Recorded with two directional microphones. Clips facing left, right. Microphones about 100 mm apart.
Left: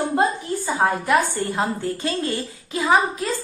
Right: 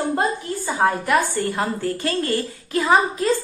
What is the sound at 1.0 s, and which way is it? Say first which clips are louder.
A woman's voice: even; 20° left (ahead or behind).